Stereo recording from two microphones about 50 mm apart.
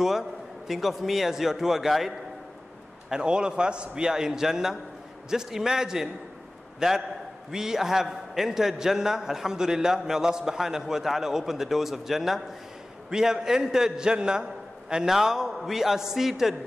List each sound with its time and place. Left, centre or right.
0.0 s a man's voice: centre
3.1 s a man's voice: centre